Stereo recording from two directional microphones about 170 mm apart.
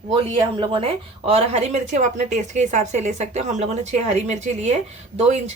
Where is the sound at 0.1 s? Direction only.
30° right (ahead or behind).